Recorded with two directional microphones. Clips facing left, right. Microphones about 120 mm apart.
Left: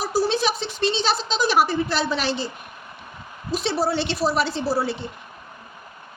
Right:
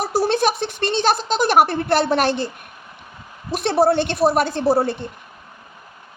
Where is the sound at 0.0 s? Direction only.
60° right (ahead or behind).